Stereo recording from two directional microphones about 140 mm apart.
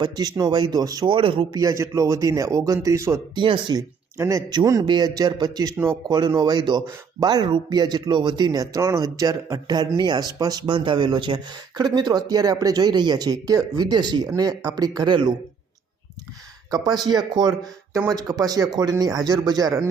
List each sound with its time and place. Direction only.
0.0 s speech: 25° right (ahead or behind)
1.6 s speech: 25° right (ahead or behind)
3.3 s speech: 35° right (ahead or behind)
4.2 s speech: 25° right (ahead or behind)
16.7 s speech: 30° right (ahead or behind)